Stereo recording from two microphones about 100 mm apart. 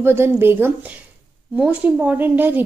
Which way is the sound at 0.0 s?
25° right (ahead or behind).